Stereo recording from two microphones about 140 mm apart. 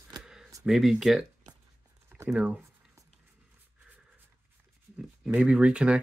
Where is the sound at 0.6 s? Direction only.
Centre (ahead or behind).